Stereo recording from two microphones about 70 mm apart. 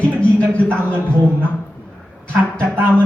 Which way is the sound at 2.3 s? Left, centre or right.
Right.